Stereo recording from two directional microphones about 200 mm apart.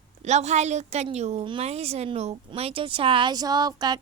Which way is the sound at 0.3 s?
35° right (ahead or behind).